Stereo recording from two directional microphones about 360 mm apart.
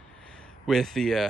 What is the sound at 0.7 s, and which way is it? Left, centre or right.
Speech, centre.